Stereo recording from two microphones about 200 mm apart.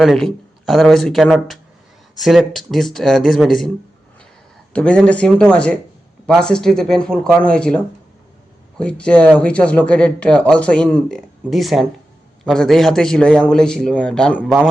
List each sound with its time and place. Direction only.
0.0 s speech: centre (ahead or behind)
4.7 s speech: 5° left (ahead or behind)
8.8 s speech: 5° left (ahead or behind)